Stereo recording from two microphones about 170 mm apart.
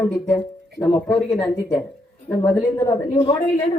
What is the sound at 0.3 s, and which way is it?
Speech, 15° left (ahead or behind).